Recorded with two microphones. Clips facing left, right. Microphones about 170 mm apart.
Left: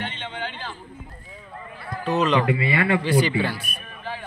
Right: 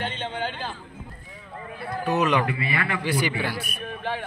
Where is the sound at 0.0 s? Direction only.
40° right (ahead or behind).